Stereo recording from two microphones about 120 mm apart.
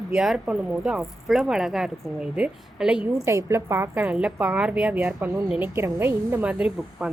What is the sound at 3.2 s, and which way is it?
Speech, 25° right (ahead or behind).